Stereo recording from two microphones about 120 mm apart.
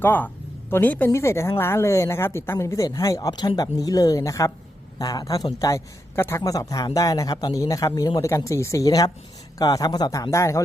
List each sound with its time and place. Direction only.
0.0 s a man's voice: 15° left (ahead or behind)